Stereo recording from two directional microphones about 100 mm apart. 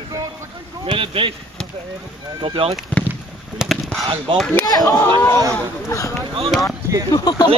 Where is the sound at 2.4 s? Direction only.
70° right (ahead or behind).